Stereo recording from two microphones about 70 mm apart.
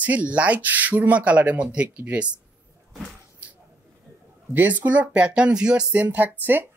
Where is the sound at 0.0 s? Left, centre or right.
Centre.